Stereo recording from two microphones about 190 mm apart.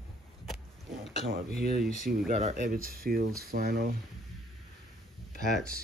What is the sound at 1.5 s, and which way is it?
Speech, 55° right (ahead or behind).